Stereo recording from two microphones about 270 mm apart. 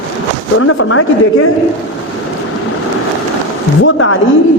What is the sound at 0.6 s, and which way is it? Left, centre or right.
Speech, left.